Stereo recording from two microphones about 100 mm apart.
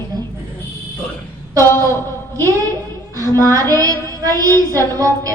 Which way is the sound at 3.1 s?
35° right (ahead or behind).